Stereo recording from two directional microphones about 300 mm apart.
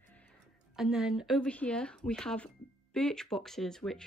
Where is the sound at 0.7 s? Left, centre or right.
Centre.